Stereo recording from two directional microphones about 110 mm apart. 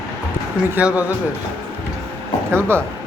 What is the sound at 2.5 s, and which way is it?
Speech, 25° right (ahead or behind).